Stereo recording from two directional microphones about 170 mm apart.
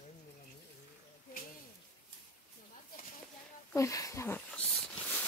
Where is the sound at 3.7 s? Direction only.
20° left (ahead or behind).